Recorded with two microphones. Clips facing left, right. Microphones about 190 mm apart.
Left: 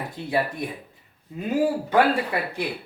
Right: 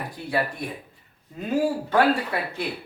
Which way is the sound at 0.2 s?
25° left (ahead or behind).